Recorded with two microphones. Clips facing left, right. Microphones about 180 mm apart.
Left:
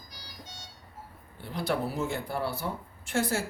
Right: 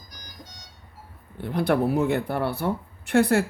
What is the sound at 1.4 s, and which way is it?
Speech, 60° right (ahead or behind).